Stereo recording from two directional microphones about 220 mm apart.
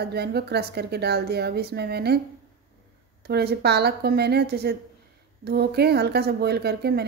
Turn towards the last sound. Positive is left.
turn(degrees=-45)  # may be behind; listen again after turning